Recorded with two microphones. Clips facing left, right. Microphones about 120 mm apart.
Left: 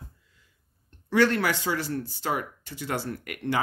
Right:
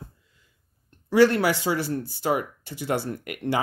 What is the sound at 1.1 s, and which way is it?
Speech, 10° right (ahead or behind).